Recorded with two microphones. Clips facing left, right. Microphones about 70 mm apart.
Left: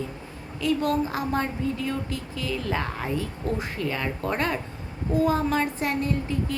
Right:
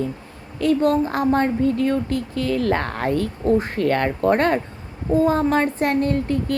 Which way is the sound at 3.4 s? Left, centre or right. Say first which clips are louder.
Right 9 dB; right.